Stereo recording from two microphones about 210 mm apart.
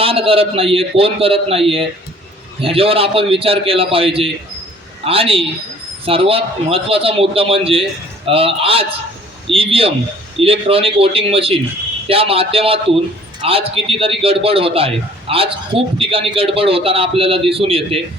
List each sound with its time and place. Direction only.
0.0 s a man's voice: 25° right (ahead or behind)